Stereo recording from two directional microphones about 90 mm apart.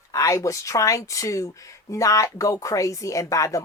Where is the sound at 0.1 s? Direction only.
35° left (ahead or behind).